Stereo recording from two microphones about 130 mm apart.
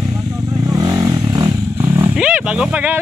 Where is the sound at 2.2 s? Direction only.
10° right (ahead or behind).